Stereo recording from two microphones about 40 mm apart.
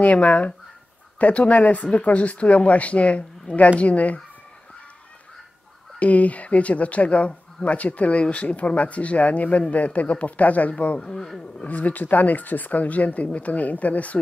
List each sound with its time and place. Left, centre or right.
0.0 s speech: left
5.9 s speech: left
11.0 s speech: centre
11.6 s speech: left